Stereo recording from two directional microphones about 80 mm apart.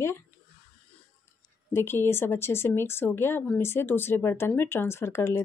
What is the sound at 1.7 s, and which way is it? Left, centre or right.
Speech, left.